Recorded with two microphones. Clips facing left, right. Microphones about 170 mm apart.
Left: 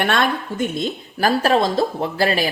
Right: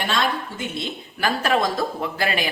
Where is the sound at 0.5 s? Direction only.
40° left (ahead or behind).